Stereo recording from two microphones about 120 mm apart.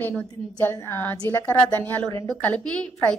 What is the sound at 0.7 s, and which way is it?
A woman's voice, 20° left (ahead or behind).